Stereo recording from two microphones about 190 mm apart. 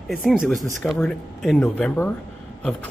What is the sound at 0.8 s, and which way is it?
Speech, 5° left (ahead or behind).